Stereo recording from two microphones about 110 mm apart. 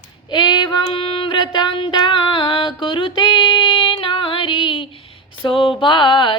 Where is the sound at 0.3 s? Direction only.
45° left (ahead or behind).